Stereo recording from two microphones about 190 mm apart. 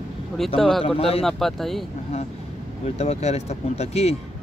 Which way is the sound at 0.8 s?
30° left (ahead or behind).